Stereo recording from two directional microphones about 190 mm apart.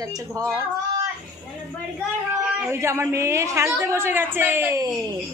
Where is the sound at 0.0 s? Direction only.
15° right (ahead or behind).